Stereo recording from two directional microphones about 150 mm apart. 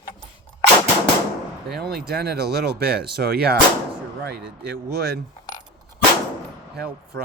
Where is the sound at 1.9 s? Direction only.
90° right.